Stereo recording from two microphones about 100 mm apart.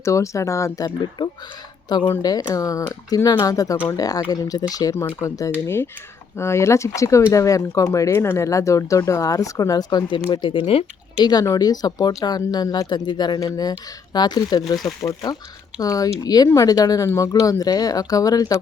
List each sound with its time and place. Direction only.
0.0 s speech: 30° left (ahead or behind)
0.9 s speech: 50° left (ahead or behind)
2.5 s speech: 35° left (ahead or behind); by 10.8 s 65° left (ahead or behind)
11.2 s speech: 45° left (ahead or behind)